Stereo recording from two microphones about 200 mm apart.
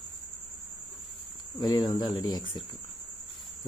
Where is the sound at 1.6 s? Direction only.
20° left (ahead or behind).